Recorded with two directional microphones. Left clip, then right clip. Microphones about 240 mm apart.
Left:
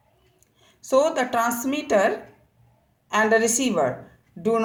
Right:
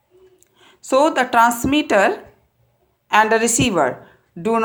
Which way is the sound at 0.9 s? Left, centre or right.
Right.